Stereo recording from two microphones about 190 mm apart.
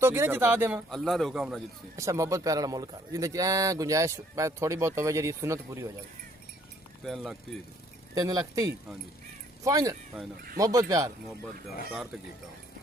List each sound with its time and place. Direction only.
0.0 s a man's voice: 15° right (ahead or behind)
0.9 s a man's voice: 5° left (ahead or behind)
2.0 s a man's voice: 15° right (ahead or behind)
7.0 s a man's voice: centre (ahead or behind)
8.1 s a man's voice: 20° right (ahead or behind)